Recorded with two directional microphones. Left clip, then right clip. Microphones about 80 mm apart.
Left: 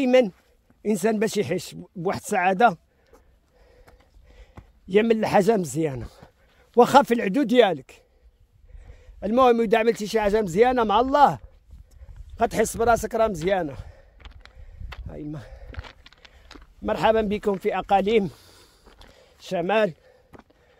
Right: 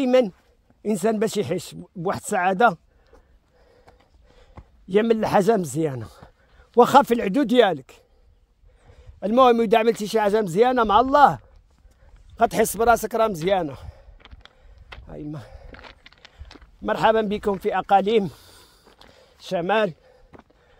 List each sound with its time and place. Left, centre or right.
0.0 s speech: centre
4.0 s run: centre
4.8 s speech: centre
8.9 s a man's voice: right
12.4 s a man's voice: right
14.1 s a sound: centre
15.0 s speech: right
16.0 s horse: right
16.5 s a sound: centre
16.8 s speech: right